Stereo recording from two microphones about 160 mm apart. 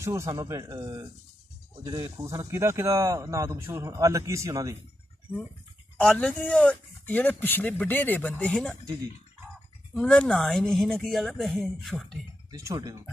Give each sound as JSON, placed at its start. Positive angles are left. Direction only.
{"t": 0.0, "sound": "speech", "side_deg": -20}
{"t": 5.9, "sound": "speech", "side_deg": 5}
{"t": 9.9, "sound": "speech", "side_deg": 5}
{"t": 12.4, "sound": "speech", "side_deg": -20}